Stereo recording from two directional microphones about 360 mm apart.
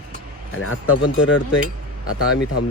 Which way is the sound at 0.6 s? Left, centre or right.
Left.